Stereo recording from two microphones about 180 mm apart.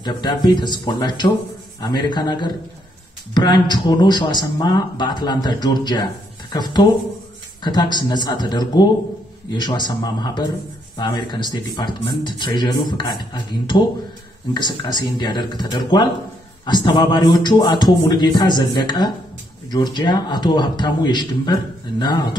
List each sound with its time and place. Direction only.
0.0 s speech: 25° left (ahead or behind)